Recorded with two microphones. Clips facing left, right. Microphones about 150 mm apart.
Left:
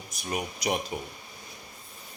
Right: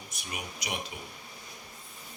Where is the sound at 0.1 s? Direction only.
40° left (ahead or behind).